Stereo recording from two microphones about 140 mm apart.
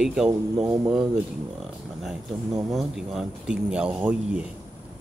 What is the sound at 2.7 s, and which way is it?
Speech, centre (ahead or behind).